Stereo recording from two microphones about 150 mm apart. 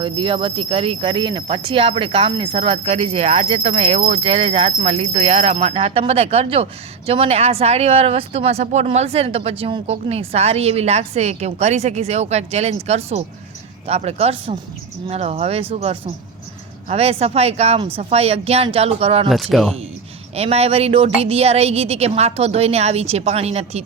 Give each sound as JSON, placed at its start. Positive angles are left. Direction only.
{"t": 0.0, "sound": "speech", "side_deg": -35}
{"t": 19.3, "sound": "speech", "side_deg": 0}
{"t": 20.3, "sound": "speech", "side_deg": -45}